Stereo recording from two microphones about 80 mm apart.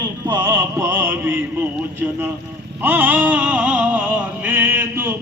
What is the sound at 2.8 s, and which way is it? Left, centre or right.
Music, right.